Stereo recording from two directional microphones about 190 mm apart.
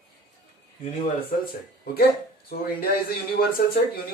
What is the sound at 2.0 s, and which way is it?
Speech, 55° left (ahead or behind).